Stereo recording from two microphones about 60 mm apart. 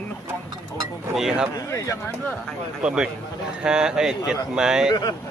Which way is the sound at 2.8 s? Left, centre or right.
Centre.